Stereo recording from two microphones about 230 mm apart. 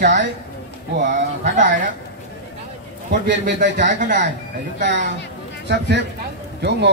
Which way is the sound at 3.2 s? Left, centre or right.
Right.